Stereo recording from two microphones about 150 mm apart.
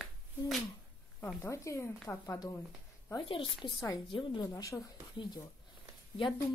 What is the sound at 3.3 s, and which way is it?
A woman's voice, 35° left (ahead or behind).